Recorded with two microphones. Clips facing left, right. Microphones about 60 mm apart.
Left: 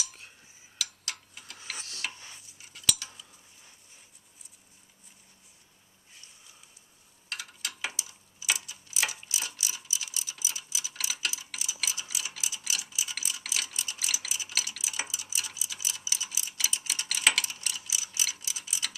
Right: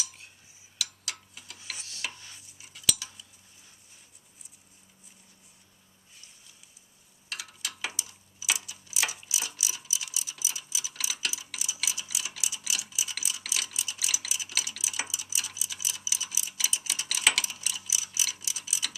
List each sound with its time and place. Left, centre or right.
0.8 s tick-tock: centre
1.7 s tick-tock: left
2.6 s cutlery: centre
7.3 s a sound: centre
8.9 s clock: centre
9.3 s mechanisms: centre
14.5 s clock: centre